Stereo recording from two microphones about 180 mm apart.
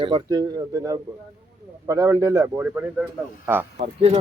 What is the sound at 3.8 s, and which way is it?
Speech, 35° right (ahead or behind).